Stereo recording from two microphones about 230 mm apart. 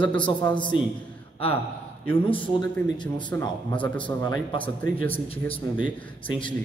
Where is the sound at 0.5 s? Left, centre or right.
Left.